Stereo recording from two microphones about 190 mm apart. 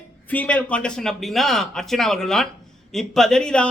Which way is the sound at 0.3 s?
10° left (ahead or behind).